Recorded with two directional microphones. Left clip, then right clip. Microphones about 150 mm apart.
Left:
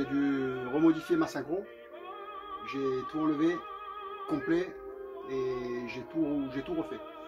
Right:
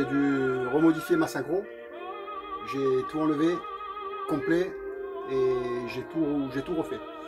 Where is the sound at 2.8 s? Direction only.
5° left (ahead or behind).